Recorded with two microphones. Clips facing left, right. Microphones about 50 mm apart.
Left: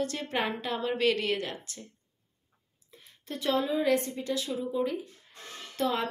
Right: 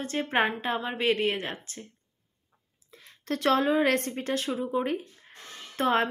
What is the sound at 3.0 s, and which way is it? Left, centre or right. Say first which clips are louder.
A woman's voice: right 6 dB; right.